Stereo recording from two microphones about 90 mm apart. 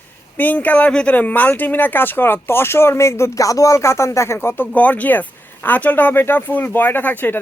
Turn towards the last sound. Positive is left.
turn(degrees=20)  # may be behind; listen again after turning